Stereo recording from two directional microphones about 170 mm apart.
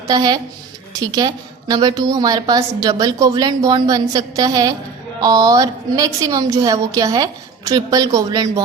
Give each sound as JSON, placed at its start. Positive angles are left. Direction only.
{"t": 0.1, "sound": "a woman's voice", "side_deg": -25}